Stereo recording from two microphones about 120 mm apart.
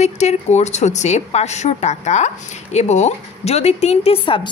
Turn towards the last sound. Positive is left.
turn(degrees=45)  # may be behind; listen again after turning